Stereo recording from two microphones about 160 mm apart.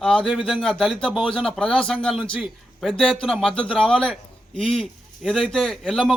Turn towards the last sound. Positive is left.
turn(degrees=5)  # may be behind; listen again after turning